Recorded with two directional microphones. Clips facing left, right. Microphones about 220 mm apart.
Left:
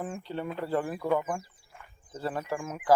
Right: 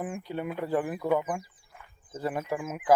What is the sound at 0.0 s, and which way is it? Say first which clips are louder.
Speech: right 1 dB; 15° right (ahead or behind).